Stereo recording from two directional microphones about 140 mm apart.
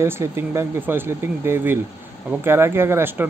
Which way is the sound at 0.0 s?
15° right (ahead or behind).